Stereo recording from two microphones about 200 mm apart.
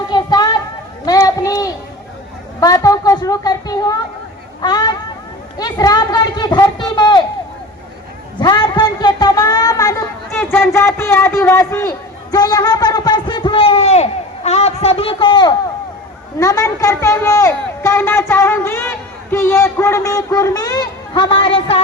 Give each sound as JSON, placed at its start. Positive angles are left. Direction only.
{"t": 0.1, "sound": "a sound", "side_deg": 20}
{"t": 2.6, "sound": "a man's voice", "side_deg": 15}
{"t": 8.4, "sound": "a man's voice", "side_deg": 25}